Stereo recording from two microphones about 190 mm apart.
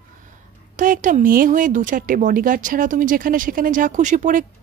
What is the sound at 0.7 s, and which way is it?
A woman's voice, 45° right (ahead or behind).